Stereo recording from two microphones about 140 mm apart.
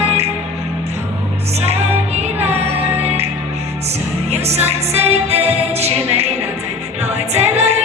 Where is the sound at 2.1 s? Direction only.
50° right (ahead or behind).